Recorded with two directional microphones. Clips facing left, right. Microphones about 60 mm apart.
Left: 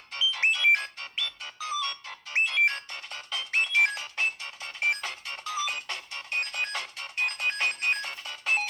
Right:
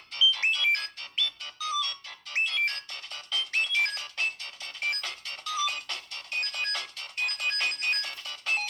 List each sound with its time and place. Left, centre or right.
0.1 s music: left